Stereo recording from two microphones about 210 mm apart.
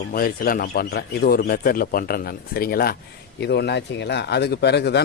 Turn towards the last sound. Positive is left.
turn(degrees=50)  # may be behind; listen again after turning